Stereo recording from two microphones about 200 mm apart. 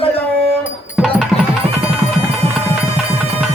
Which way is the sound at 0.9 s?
5° right (ahead or behind).